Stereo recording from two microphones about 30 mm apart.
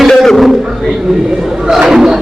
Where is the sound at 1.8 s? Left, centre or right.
Centre.